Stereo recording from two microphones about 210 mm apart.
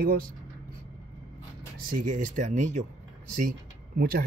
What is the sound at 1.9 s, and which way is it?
Speech, 40° right (ahead or behind).